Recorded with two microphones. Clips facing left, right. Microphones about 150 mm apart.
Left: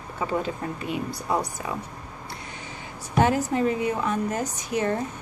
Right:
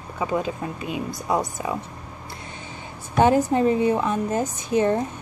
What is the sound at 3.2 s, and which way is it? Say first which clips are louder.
A woman's voice: right 4 dB; 25° right (ahead or behind).